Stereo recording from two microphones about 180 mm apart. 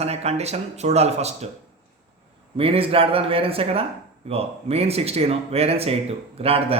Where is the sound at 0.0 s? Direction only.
35° right (ahead or behind).